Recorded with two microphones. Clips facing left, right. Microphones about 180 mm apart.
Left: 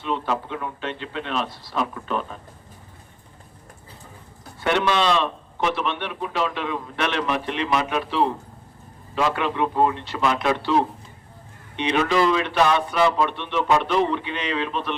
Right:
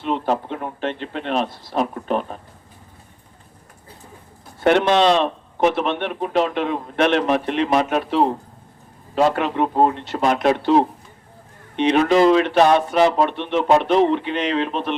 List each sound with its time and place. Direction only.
0.0 s a man's voice: 45° right (ahead or behind)
4.6 s a man's voice: 45° right (ahead or behind)
11.8 s a man's voice: 45° right (ahead or behind)